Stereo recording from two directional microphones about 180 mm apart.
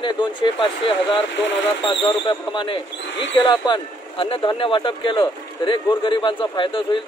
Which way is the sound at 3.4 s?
25° left (ahead or behind).